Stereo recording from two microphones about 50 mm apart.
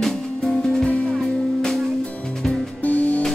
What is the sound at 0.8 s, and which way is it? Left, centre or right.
Music, left.